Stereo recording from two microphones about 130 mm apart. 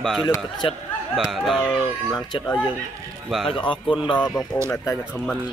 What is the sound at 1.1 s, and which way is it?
Speech, centre (ahead or behind).